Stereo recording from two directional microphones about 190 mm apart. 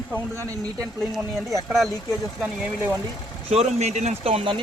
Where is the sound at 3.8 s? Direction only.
35° right (ahead or behind).